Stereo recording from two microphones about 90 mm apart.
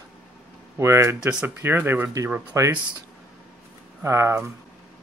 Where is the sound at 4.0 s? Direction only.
30° right (ahead or behind).